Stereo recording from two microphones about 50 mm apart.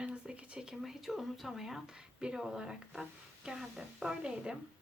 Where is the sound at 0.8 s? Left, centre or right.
Centre.